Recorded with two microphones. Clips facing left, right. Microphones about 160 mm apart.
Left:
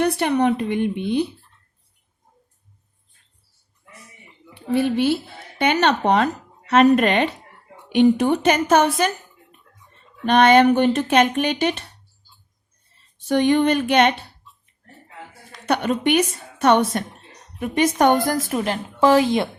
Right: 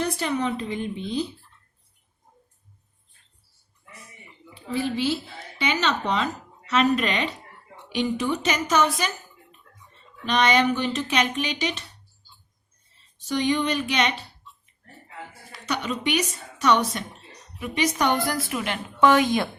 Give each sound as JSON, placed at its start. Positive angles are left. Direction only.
{"t": 0.0, "sound": "speech", "side_deg": 65}
{"t": 4.5, "sound": "a woman's voice", "side_deg": 60}
{"t": 13.1, "sound": "speech", "side_deg": 55}
{"t": 15.6, "sound": "a woman's voice", "side_deg": 55}